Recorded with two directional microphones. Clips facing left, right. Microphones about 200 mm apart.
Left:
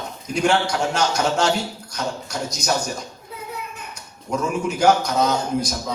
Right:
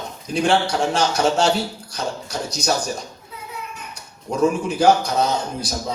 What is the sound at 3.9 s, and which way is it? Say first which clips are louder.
A man's voice: right 5 dB; 30° right (ahead or behind).